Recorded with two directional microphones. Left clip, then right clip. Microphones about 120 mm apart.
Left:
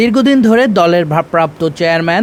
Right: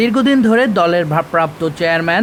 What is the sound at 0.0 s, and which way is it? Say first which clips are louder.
Speech: left 3 dB; 20° left (ahead or behind).